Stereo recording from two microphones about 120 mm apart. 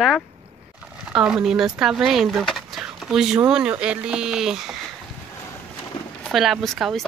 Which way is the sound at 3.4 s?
10° right (ahead or behind).